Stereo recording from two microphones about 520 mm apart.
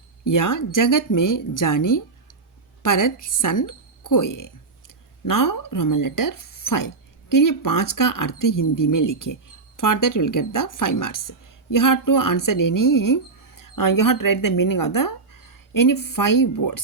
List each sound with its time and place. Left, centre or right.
0.3 s speech: left